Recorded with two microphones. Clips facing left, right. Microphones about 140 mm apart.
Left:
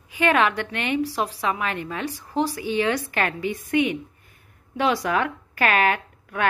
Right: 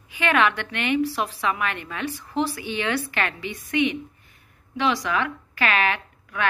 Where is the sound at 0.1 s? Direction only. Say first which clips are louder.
Left 1 dB; 40° left (ahead or behind).